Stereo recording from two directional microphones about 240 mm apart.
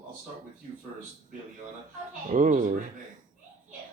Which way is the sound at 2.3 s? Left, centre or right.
Right.